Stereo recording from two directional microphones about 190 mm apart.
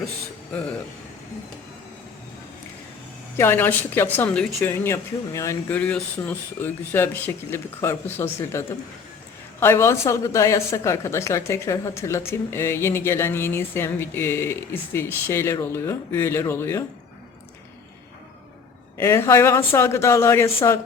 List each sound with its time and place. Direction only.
3.3 s a woman's voice: 10° left (ahead or behind)
18.9 s a woman's voice: 15° left (ahead or behind)